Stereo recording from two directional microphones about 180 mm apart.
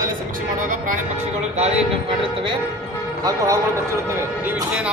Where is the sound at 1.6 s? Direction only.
30° right (ahead or behind).